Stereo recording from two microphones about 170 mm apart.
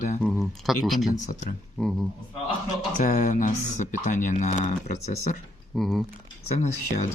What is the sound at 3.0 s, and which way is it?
Speech, 45° left (ahead or behind).